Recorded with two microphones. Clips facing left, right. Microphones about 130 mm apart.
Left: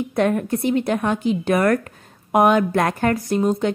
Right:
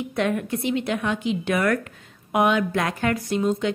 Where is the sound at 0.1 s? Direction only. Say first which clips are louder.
Left 5 dB; 40° left (ahead or behind).